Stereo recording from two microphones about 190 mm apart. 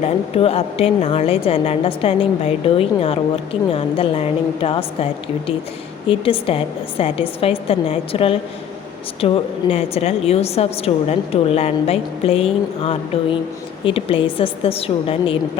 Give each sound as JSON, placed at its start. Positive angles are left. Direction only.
{"t": 0.0, "sound": "a woman's voice", "side_deg": 30}
{"t": 6.1, "sound": "a woman's voice", "side_deg": 30}